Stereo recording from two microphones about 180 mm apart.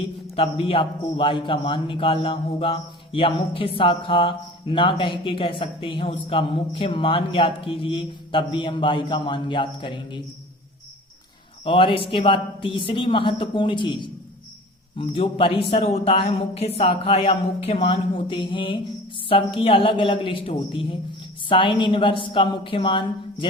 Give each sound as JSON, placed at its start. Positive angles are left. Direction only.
{"t": 0.3, "sound": "a man's voice", "side_deg": 30}
{"t": 11.6, "sound": "a man's voice", "side_deg": 30}